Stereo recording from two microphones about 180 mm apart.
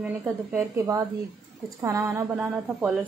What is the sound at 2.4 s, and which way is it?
Speech, 5° right (ahead or behind).